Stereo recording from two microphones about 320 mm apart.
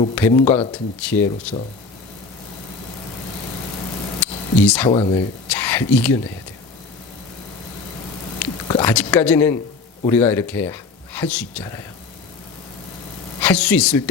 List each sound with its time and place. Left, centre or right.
0.2 s speech: centre
4.6 s speech: centre
4.9 s speech: centre
8.4 s a sound: centre
8.9 s speech: centre
13.4 s speech: centre